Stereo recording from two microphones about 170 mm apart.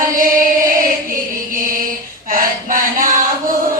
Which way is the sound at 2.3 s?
55° right (ahead or behind).